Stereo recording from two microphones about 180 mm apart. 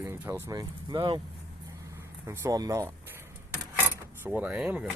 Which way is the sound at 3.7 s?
10° right (ahead or behind).